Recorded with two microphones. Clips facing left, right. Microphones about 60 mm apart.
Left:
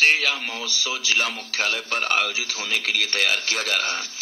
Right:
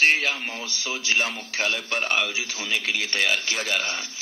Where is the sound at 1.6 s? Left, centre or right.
Left.